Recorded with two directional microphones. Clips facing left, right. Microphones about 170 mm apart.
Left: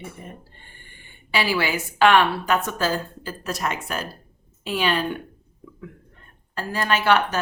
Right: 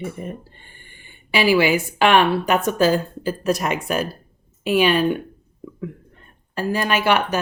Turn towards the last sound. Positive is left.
turn(degrees=-15)  # may be behind; listen again after turning